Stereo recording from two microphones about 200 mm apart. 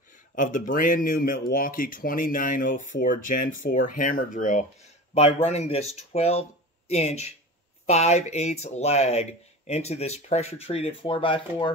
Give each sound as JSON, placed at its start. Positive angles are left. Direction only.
{"t": 0.4, "sound": "speech", "side_deg": 40}